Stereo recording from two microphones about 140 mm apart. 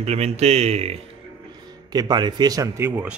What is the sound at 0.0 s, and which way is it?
Speech, 50° right (ahead or behind).